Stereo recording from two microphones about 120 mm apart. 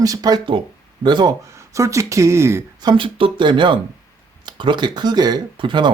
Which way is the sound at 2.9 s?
45° right (ahead or behind).